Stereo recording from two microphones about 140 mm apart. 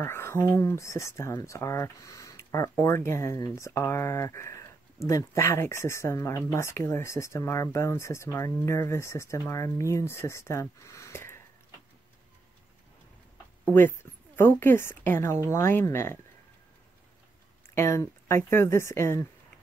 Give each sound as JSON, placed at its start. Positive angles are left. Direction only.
{"t": 0.0, "sound": "speech", "side_deg": 20}
{"t": 13.7, "sound": "a woman's voice", "side_deg": 15}
{"t": 17.7, "sound": "speech", "side_deg": 20}